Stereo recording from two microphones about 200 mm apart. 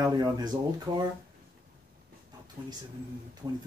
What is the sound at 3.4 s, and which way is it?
Speech, 20° right (ahead or behind).